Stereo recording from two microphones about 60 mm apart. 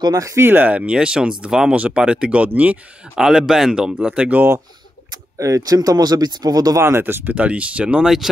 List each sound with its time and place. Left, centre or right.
0.1 s speech: right
0.4 s speech: right
3.2 s speech: centre
5.4 s speech: right
7.0 s speech: right
7.3 s speech: right